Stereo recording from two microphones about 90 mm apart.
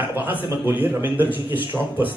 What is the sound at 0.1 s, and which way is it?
Speech, 20° right (ahead or behind).